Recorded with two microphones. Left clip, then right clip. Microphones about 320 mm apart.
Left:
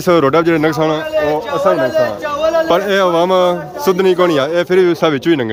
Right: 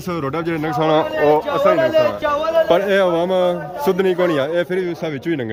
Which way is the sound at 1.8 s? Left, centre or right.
Right.